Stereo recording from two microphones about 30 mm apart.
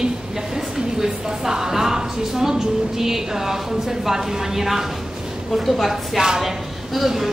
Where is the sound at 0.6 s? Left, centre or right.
Centre.